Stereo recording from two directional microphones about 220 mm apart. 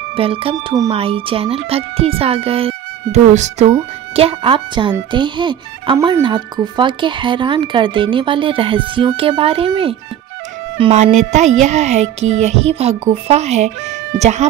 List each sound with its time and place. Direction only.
0.1 s speech: 25° right (ahead or behind)